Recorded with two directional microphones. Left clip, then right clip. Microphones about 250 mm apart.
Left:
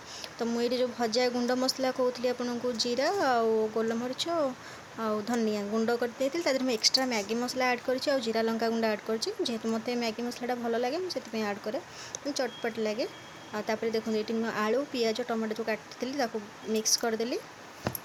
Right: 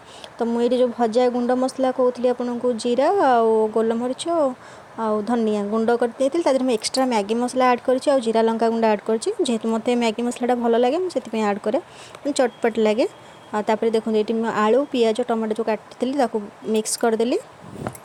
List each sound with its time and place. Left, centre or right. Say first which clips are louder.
0.3 s speech: right 10 dB; centre